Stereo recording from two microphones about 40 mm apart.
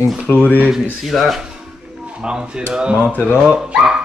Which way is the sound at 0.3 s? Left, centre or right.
Left.